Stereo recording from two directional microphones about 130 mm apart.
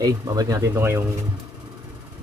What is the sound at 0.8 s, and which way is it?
Speech, 20° right (ahead or behind).